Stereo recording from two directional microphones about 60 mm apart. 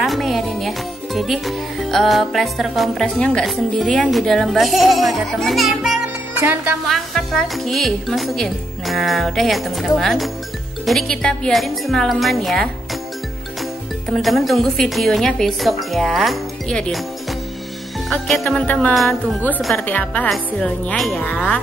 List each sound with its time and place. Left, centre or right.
0.0 s a woman's voice: centre
3.2 s speech: centre
3.4 s a woman's voice: centre
6.4 s music: right
6.9 s a woman's voice: centre
14.0 s a woman's voice: centre
18.2 s speech: centre
18.7 s a woman's voice: left
20.9 s a woman's voice: centre
21.2 s a woman's voice: left